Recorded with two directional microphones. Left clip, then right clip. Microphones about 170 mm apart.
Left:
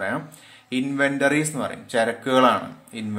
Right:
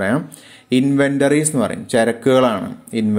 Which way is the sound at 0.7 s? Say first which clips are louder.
Right 7 dB; 40° right (ahead or behind).